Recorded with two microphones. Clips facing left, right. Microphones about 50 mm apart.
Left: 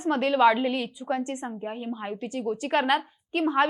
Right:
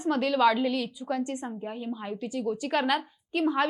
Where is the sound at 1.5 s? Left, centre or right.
Centre.